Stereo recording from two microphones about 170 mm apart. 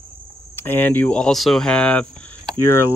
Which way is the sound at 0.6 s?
10° left (ahead or behind).